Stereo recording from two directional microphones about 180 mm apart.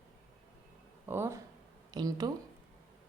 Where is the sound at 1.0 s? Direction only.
15° right (ahead or behind).